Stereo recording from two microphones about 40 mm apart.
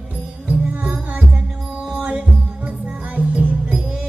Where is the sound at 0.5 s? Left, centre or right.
Right.